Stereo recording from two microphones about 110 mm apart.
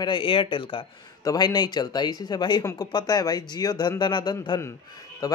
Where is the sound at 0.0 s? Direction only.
50° left (ahead or behind).